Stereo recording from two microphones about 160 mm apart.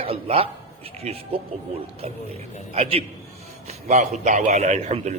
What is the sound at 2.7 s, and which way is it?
A man's voice, 35° right (ahead or behind).